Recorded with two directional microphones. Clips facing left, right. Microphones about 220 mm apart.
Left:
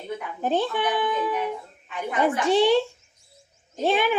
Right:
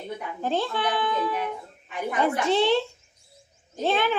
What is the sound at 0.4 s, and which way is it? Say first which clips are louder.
A child's voice: left 3 dB; 15° left (ahead or behind).